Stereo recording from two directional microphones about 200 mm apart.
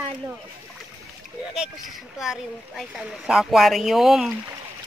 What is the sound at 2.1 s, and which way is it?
Speech, centre (ahead or behind).